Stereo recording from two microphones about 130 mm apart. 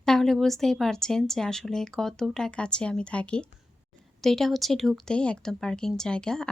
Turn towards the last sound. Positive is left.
turn(degrees=5)  # may be behind; listen again after turning